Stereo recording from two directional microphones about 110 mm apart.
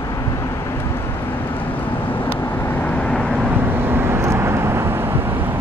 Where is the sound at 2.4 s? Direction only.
20° left (ahead or behind).